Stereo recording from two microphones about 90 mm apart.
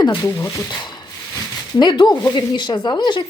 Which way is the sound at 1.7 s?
55° left (ahead or behind).